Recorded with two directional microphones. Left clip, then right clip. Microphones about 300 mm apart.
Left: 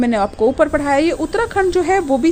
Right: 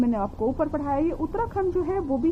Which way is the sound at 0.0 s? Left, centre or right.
Left.